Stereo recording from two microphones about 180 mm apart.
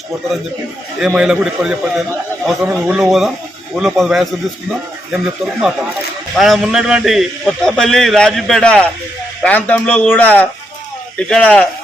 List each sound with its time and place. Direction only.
0.9 s a man's voice: 5° right (ahead or behind)